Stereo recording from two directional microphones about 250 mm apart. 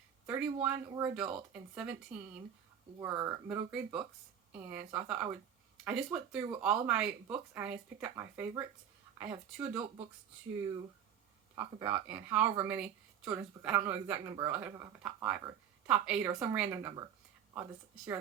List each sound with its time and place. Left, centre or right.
0.3 s a woman's voice: centre
11.5 s a woman's voice: centre